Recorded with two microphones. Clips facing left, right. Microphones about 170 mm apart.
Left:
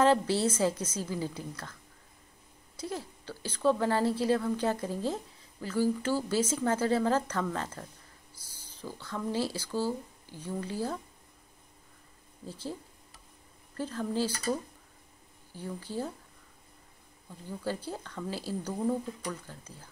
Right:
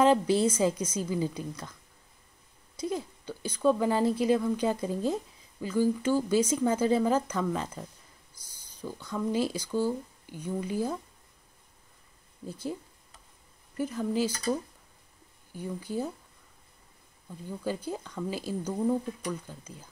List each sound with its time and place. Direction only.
0.0 s speech: 15° right (ahead or behind)
2.8 s speech: 15° right (ahead or behind)
12.4 s speech: 15° right (ahead or behind)
13.7 s speech: 15° right (ahead or behind)
17.8 s speech: 15° right (ahead or behind)